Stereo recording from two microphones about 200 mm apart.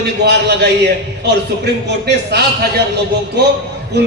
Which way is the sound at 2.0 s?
55° right (ahead or behind).